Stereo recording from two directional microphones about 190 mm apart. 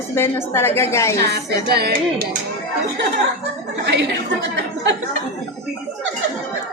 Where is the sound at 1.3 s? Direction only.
55° right (ahead or behind).